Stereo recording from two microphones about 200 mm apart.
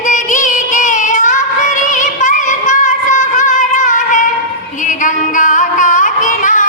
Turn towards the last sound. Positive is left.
turn(degrees=40)  # may be behind; listen again after turning